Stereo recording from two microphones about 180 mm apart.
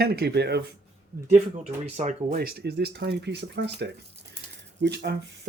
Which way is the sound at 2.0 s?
45° right (ahead or behind).